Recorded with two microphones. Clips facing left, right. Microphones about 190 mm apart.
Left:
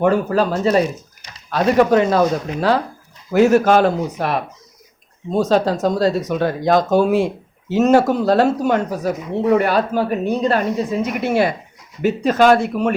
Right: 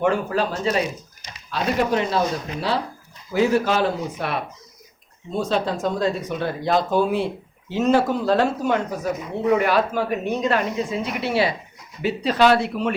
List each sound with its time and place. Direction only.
0.0 s speech: 40° left (ahead or behind)
3.3 s speech: 45° left (ahead or behind)